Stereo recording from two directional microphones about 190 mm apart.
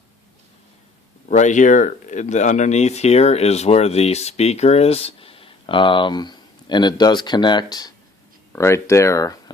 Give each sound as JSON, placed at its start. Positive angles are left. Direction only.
{"t": 1.3, "sound": "speech", "side_deg": 40}